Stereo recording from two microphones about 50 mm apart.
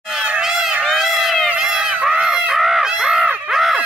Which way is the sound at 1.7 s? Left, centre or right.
Right.